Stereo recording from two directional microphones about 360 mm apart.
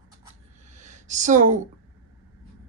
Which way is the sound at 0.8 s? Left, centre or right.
Centre.